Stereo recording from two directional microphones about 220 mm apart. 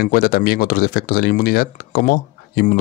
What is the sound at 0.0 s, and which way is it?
Speech, 40° left (ahead or behind).